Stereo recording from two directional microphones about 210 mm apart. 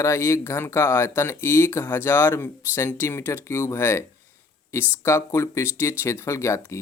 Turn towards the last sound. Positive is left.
turn(degrees=15)  # may be behind; listen again after turning